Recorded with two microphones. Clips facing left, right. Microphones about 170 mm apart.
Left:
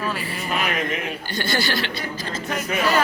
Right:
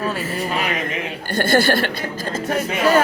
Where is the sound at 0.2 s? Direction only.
40° right (ahead or behind).